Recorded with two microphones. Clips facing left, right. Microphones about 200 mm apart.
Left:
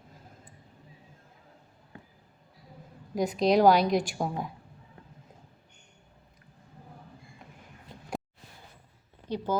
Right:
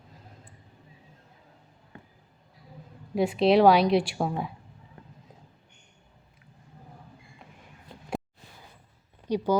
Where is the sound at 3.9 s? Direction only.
45° left (ahead or behind).